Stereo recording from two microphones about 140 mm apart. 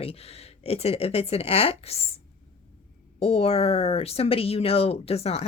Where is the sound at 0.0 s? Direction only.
45° left (ahead or behind).